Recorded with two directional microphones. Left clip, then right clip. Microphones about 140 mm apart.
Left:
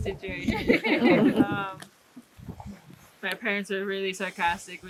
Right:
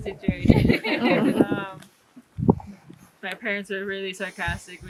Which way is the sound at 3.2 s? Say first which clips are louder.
Even; 5° left (ahead or behind).